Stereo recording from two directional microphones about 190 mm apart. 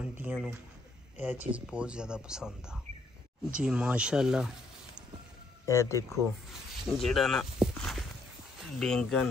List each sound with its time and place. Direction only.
0.0 s speech: 5° right (ahead or behind)
5.7 s speech: 15° left (ahead or behind)
7.0 s speech: centre (ahead or behind)